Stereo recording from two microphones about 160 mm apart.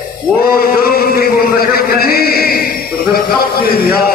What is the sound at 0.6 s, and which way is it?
Chant, 75° left (ahead or behind).